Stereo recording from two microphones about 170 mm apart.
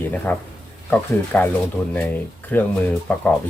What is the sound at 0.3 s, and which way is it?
Speech, 10° left (ahead or behind).